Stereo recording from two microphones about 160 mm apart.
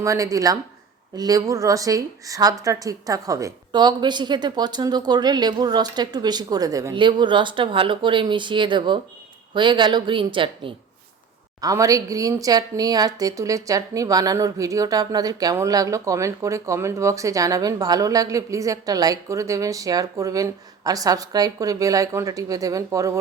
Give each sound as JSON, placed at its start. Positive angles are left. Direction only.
{"t": 0.0, "sound": "speech", "side_deg": -20}
{"t": 11.6, "sound": "speech", "side_deg": -20}